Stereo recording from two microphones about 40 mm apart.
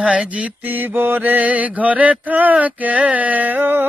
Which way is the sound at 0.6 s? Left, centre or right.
Right.